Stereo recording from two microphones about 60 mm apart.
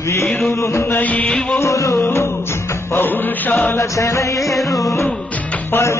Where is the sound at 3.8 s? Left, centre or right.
Left.